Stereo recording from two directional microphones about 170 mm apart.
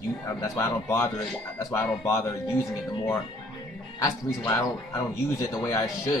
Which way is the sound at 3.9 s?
20° left (ahead or behind).